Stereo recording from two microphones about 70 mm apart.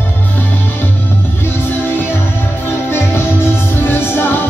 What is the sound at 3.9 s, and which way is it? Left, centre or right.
Music, left.